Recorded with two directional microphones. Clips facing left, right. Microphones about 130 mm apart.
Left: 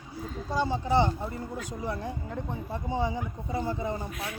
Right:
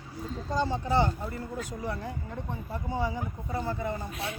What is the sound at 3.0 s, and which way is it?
Speech, 20° left (ahead or behind).